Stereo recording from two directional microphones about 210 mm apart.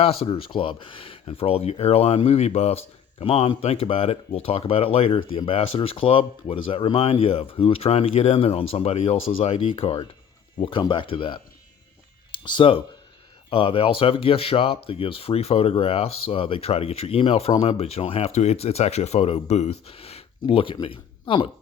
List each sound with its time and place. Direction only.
0.0 s speech: 25° left (ahead or behind)
9.1 s speech: 70° left (ahead or behind)
9.4 s speech: 30° left (ahead or behind)
12.5 s speech: 25° left (ahead or behind)